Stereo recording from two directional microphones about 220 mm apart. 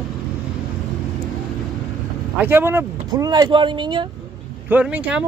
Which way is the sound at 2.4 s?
10° right (ahead or behind).